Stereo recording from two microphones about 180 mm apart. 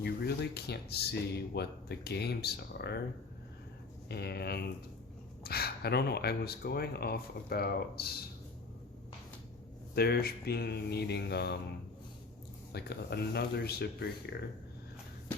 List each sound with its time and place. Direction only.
0.0 s speech: 65° left (ahead or behind)
4.1 s speech: 65° left (ahead or behind)
9.9 s speech: 60° left (ahead or behind)
12.7 s speech: 65° left (ahead or behind)